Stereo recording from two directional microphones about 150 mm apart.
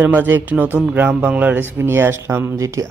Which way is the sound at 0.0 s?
15° right (ahead or behind).